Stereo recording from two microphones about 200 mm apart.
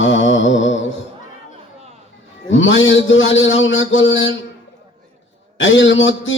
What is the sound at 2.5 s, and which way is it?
Speech, 70° left (ahead or behind).